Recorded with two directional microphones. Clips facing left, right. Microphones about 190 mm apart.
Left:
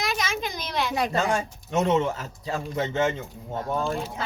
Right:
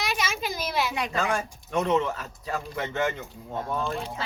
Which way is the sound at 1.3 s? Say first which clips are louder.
Left 2 dB; 25° left (ahead or behind).